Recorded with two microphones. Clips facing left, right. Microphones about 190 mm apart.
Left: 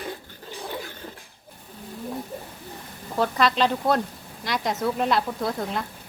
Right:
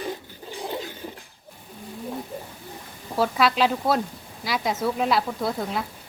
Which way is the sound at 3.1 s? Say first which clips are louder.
Right 1 dB; 5° right (ahead or behind).